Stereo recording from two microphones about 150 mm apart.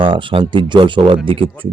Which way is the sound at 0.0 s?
35° right (ahead or behind).